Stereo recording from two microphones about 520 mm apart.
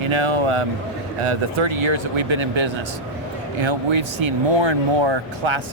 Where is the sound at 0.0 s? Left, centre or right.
Right.